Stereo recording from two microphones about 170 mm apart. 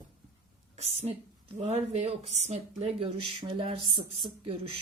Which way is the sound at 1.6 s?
40° right (ahead or behind).